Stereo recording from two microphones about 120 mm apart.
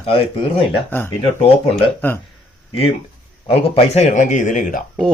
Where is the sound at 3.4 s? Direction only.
50° left (ahead or behind); by 4.7 s 90° left.